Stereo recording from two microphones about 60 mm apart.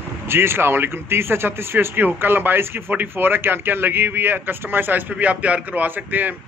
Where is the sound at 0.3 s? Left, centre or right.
Right.